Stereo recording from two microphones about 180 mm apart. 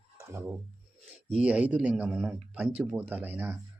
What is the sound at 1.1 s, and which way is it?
Speech, 5° right (ahead or behind).